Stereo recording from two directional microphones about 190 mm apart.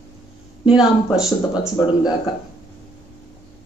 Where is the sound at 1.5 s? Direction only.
20° left (ahead or behind).